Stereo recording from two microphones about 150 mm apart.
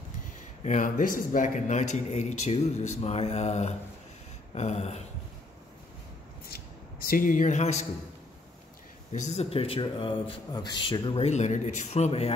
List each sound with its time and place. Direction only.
0.7 s speech: 55° left (ahead or behind)
7.1 s speech: 65° left (ahead or behind)
9.1 s speech: 50° left (ahead or behind)